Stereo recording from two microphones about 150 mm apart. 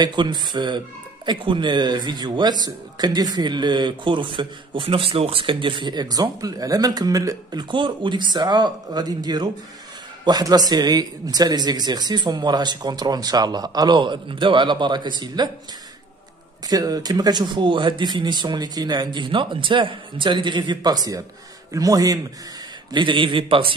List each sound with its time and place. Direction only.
0.0 s speech: 30° right (ahead or behind)
16.6 s speech: 25° right (ahead or behind)